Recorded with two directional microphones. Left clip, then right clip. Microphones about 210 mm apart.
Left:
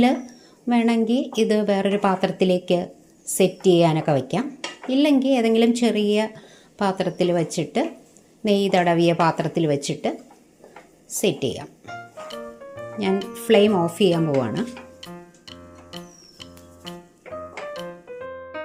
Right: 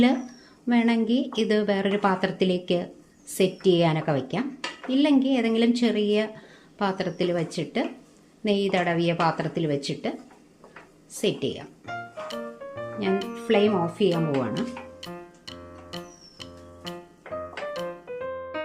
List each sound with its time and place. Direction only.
0.7 s speech: 15° left (ahead or behind)
11.2 s speech: 15° left (ahead or behind)
11.9 s music: centre (ahead or behind)
13.1 s speech: centre (ahead or behind)
13.5 s speech: 20° left (ahead or behind)
14.1 s speech: centre (ahead or behind)
15.0 s music: centre (ahead or behind)